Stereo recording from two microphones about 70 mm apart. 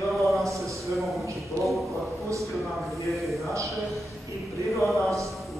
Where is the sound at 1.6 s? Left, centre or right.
Right.